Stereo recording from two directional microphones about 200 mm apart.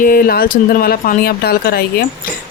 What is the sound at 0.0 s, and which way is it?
Speech, 45° left (ahead or behind).